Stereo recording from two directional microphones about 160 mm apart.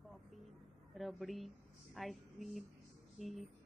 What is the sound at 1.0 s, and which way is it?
A woman's voice, centre (ahead or behind).